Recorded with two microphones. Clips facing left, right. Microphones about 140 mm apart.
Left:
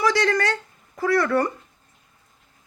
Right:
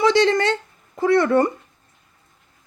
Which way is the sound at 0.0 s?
25° right (ahead or behind).